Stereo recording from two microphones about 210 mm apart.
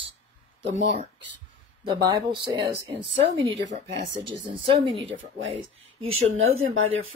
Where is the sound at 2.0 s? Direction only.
20° right (ahead or behind).